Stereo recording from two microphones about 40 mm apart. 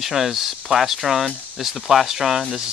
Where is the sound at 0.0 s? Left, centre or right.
Centre.